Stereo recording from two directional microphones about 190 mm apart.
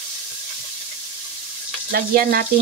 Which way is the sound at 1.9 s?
50° right (ahead or behind).